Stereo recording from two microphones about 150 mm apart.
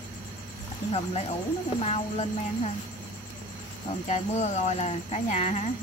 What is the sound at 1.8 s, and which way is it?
Speech, 45° left (ahead or behind).